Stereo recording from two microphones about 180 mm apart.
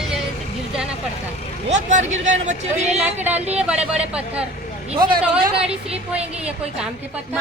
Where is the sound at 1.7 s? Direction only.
40° right (ahead or behind).